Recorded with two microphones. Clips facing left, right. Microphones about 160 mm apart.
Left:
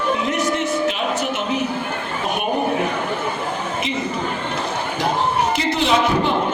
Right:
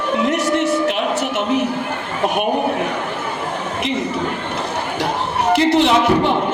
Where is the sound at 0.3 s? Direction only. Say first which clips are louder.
Right 3 dB; 70° right (ahead or behind).